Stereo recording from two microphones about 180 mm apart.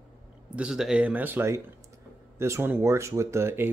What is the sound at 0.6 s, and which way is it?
Speech, 5° right (ahead or behind).